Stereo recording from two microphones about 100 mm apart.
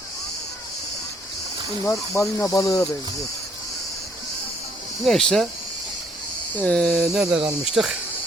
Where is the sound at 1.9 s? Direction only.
25° left (ahead or behind).